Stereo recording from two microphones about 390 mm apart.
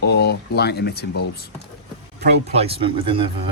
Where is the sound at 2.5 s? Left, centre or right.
Centre.